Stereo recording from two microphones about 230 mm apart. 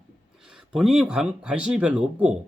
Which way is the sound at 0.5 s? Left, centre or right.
Centre.